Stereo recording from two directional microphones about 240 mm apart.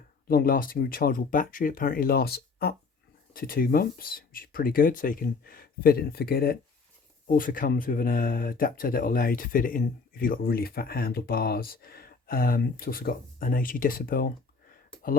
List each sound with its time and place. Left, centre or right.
0.3 s speech: left